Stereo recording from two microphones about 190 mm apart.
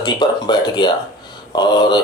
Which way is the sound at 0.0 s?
25° left (ahead or behind).